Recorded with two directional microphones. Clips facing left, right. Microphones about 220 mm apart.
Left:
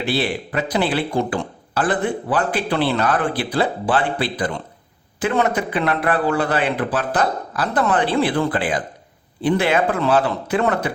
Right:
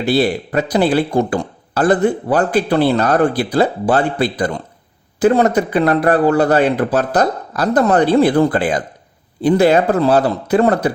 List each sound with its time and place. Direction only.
0.0 s speech: 40° right (ahead or behind)